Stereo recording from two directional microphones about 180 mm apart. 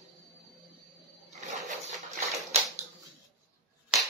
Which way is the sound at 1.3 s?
40° right (ahead or behind).